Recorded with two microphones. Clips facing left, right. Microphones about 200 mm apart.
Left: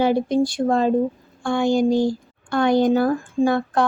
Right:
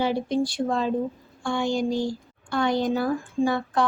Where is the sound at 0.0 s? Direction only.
50° left (ahead or behind).